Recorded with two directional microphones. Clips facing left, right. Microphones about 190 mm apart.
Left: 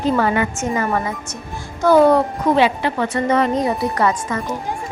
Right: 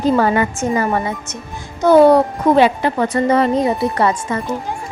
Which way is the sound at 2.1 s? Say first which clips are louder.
Right 3 dB; 45° right (ahead or behind).